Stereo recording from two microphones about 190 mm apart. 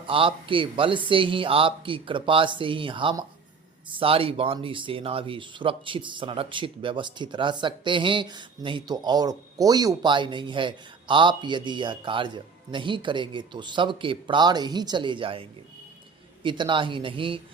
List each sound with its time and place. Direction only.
0.1 s speech: 25° right (ahead or behind)